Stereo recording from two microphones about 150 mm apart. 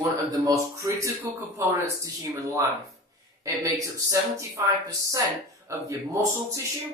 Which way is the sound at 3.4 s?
20° right (ahead or behind).